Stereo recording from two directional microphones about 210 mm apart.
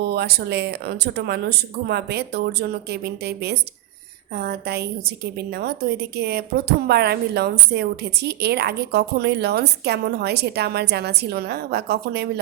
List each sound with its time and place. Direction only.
0.1 s a woman's voice: 50° right (ahead or behind)